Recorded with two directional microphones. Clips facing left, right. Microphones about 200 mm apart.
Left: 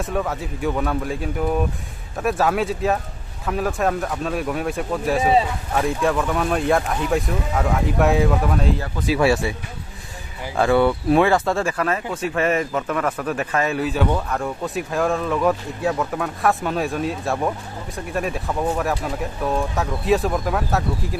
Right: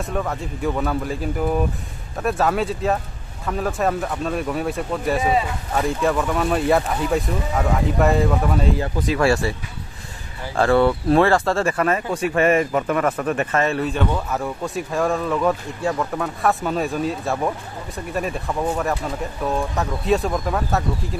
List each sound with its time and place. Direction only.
0.0 s speech: centre (ahead or behind)
10.5 s speech: centre (ahead or behind)